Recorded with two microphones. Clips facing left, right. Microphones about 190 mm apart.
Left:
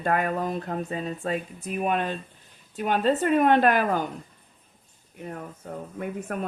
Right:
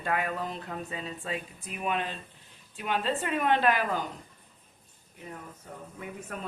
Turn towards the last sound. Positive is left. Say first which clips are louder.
# left 8 dB
turn(degrees=55)  # may be behind; listen again after turning